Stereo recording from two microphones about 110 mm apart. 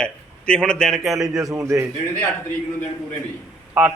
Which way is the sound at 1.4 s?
30° right (ahead or behind).